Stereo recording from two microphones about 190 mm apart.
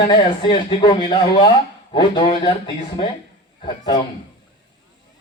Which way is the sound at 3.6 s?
20° left (ahead or behind).